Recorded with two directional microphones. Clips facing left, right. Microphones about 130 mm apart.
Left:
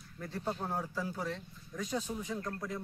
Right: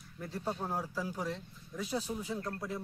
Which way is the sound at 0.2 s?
10° right (ahead or behind).